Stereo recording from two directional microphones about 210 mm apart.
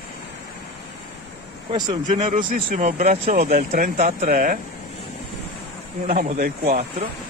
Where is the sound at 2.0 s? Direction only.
35° right (ahead or behind).